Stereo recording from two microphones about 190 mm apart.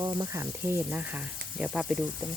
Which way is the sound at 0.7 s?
10° right (ahead or behind).